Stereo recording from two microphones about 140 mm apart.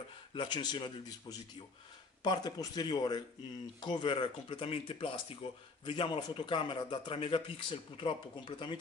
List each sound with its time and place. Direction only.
0.3 s speech: 35° left (ahead or behind)